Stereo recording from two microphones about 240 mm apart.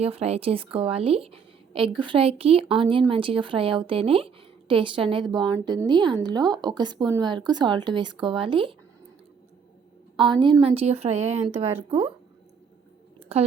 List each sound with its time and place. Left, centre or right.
0.0 s a woman's voice: right
10.2 s a woman's voice: centre
13.1 s a sound: right